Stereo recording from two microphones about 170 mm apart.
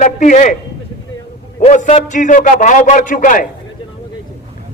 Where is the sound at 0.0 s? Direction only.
45° left (ahead or behind).